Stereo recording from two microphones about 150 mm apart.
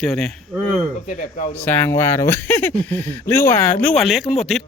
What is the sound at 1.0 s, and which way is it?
Speech, 60° left (ahead or behind).